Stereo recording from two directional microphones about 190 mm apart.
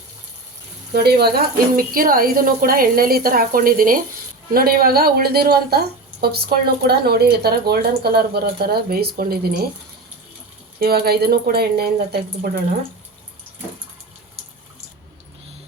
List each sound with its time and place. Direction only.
0.9 s a woman's voice: 55° right (ahead or behind)
10.8 s speech: 55° right (ahead or behind)